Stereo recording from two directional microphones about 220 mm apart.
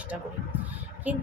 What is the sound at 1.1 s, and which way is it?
Speech, 5° right (ahead or behind).